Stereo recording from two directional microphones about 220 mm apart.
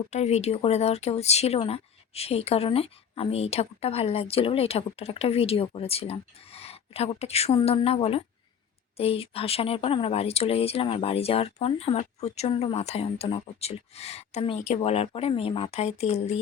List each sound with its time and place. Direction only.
0.1 s speech: 30° left (ahead or behind)